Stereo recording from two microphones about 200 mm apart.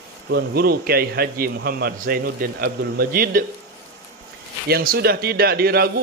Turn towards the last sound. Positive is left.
turn(degrees=-50)  # may be behind; listen again after turning